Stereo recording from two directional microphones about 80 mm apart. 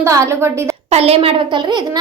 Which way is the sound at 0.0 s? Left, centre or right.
Right.